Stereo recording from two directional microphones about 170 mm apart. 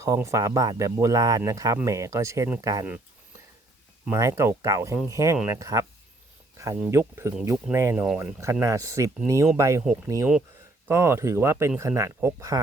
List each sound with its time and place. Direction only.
0.0 s speech: 20° right (ahead or behind)
4.0 s speech: 15° right (ahead or behind)
6.9 s speech: 15° right (ahead or behind)
10.8 s speech: 15° right (ahead or behind)